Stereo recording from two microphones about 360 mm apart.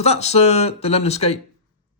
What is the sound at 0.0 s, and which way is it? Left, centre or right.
Speech, centre.